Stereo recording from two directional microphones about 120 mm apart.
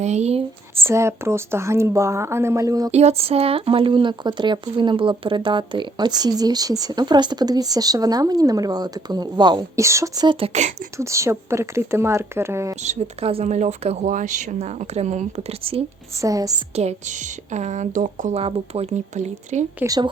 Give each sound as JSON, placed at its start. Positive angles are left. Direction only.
{"t": 0.0, "sound": "speech", "side_deg": -65}
{"t": 0.9, "sound": "speech", "side_deg": -20}
{"t": 2.9, "sound": "speech", "side_deg": -60}
{"t": 12.8, "sound": "speech", "side_deg": -60}
{"t": 13.5, "sound": "speech", "side_deg": -70}
{"t": 16.2, "sound": "speech", "side_deg": -30}
{"t": 16.7, "sound": "speech", "side_deg": -75}
{"t": 18.4, "sound": "speech", "side_deg": -60}